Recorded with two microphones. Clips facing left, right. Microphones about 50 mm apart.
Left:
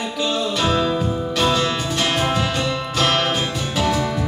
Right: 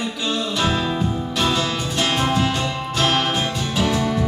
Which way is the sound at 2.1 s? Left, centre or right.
Left.